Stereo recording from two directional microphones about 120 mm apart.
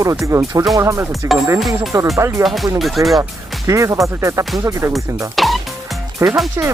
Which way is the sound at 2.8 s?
Centre (ahead or behind).